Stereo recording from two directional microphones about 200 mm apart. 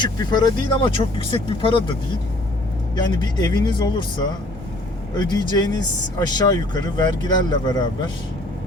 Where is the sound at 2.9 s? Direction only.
20° left (ahead or behind).